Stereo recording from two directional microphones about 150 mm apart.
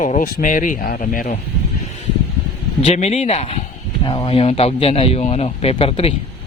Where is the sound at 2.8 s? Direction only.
45° left (ahead or behind).